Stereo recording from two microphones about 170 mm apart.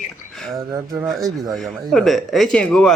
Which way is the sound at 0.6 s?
20° right (ahead or behind).